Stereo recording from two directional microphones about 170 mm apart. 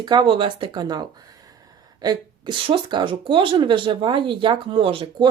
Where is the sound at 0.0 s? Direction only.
25° right (ahead or behind).